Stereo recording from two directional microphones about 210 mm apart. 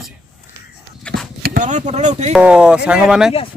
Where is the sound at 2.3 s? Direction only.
5° right (ahead or behind).